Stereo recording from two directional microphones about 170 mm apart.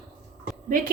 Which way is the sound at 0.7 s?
55° right (ahead or behind).